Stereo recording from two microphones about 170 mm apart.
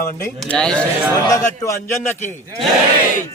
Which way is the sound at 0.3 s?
5° left (ahead or behind).